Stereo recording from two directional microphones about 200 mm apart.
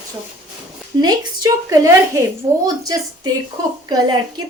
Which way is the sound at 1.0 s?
20° right (ahead or behind).